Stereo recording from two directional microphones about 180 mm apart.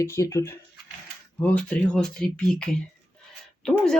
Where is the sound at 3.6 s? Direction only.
5° left (ahead or behind).